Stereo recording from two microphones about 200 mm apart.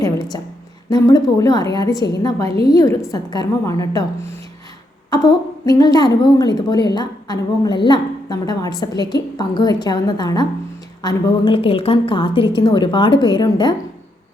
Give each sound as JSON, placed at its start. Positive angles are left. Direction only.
{"t": 0.9, "sound": "a woman's voice", "side_deg": 20}